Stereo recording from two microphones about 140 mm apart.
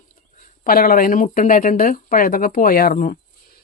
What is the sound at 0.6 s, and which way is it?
Speech, 90° left.